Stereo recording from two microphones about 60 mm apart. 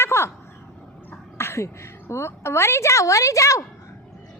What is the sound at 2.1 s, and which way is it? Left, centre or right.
A woman's voice, left.